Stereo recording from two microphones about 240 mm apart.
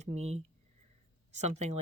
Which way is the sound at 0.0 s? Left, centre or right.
Right.